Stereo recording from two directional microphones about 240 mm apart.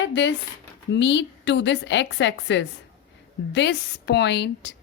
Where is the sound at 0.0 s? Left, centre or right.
Left.